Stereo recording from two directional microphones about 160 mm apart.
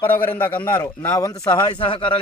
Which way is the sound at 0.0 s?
10° left (ahead or behind).